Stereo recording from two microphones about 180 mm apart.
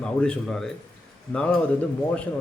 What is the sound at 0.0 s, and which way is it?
A man's voice, 5° left (ahead or behind).